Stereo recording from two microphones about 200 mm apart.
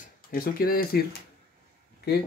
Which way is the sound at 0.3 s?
45° left (ahead or behind).